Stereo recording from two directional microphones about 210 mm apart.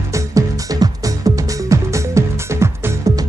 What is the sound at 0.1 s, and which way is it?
Music, 15° right (ahead or behind).